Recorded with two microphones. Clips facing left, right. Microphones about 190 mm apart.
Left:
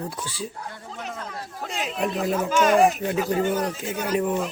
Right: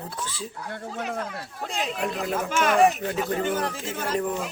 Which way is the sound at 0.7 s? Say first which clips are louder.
Right 4 dB; 60° right (ahead or behind).